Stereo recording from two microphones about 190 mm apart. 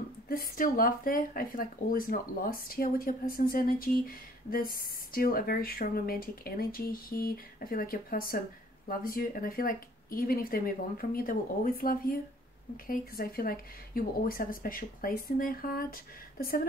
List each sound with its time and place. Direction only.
0.3 s speech: 50° left (ahead or behind)